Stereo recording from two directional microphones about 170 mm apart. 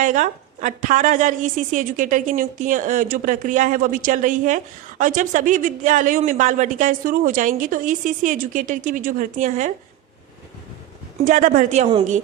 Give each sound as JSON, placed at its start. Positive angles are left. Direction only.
{"t": 0.0, "sound": "a woman's voice", "side_deg": -50}
{"t": 11.3, "sound": "a woman's voice", "side_deg": -50}